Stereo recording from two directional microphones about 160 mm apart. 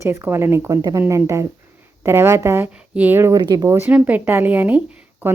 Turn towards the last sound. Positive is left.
turn(degrees=-10)  # may be behind; listen again after turning